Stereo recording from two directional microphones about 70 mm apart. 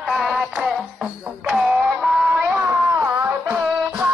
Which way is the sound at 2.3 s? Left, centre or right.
Right.